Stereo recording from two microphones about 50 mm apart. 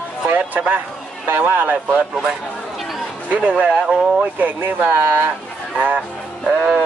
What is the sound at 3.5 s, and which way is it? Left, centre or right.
Speech, right.